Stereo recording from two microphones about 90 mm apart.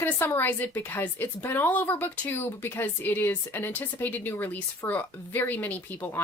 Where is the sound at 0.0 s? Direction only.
25° left (ahead or behind).